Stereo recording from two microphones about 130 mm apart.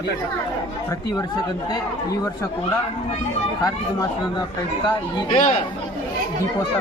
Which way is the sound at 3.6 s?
30° left (ahead or behind).